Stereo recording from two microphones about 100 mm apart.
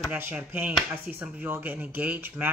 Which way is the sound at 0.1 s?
15° right (ahead or behind).